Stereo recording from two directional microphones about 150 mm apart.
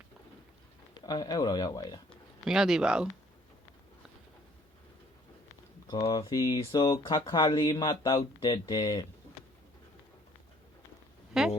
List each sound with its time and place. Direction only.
0.9 s speech: 30° left (ahead or behind)
2.4 s speech: 5° right (ahead or behind)
5.9 s speech: 25° left (ahead or behind)
7.8 s speech: 20° left (ahead or behind)
11.3 s a sound: 5° right (ahead or behind)